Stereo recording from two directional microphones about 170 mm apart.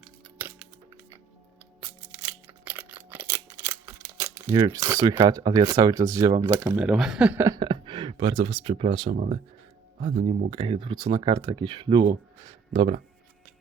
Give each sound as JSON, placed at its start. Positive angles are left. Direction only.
{"t": 0.3, "sound": "music", "side_deg": -10}
{"t": 1.8, "sound": "a sound", "side_deg": -15}
{"t": 4.5, "sound": "speech", "side_deg": -25}
{"t": 6.7, "sound": "speech", "side_deg": -5}
{"t": 7.4, "sound": "speech", "side_deg": -25}
{"t": 9.1, "sound": "speech", "side_deg": -55}
{"t": 10.0, "sound": "speech", "side_deg": -35}